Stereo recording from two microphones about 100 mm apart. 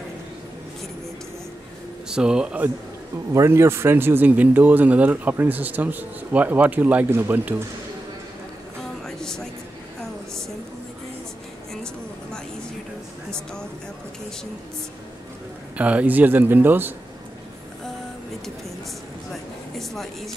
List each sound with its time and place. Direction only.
2.0 s speech: 10° right (ahead or behind)
3.3 s speech: 25° right (ahead or behind)
9.0 s music: 5° left (ahead or behind)
11.7 s a sound: 10° left (ahead or behind)
15.8 s speech: 15° right (ahead or behind)
19.8 s a sound: centre (ahead or behind)